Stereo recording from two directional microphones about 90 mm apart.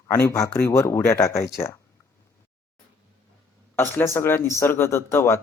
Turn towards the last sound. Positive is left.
turn(degrees=30)  # may be behind; listen again after turning